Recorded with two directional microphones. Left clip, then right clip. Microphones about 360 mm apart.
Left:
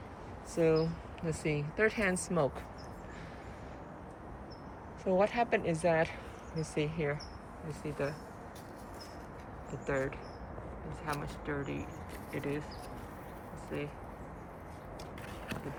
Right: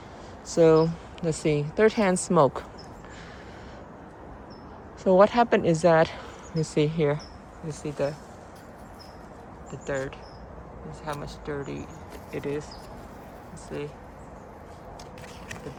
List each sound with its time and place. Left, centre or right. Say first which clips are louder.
0.5 s speech: right 11 dB; centre
5.0 s speech: right 11 dB; centre
9.8 s speech: right 4 dB; centre